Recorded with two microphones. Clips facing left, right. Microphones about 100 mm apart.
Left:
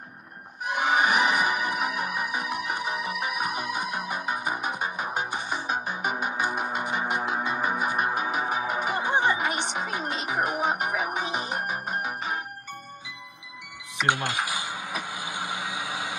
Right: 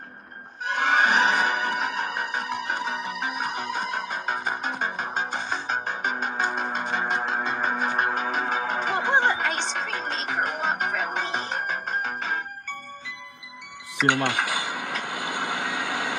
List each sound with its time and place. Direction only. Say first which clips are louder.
0.7 s music: right 1 dB; 10° left (ahead or behind)
14.0 s a sound: right 3 dB; 60° right (ahead or behind)
15.0 s vehicle: right 4 dB; 60° right (ahead or behind)